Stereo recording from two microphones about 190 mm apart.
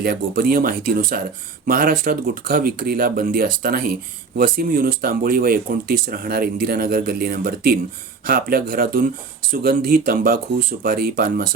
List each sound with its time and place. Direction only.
0.0 s speech: 50° right (ahead or behind)